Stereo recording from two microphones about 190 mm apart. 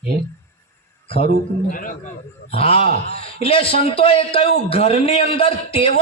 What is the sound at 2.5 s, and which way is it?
A man's voice, 30° left (ahead or behind).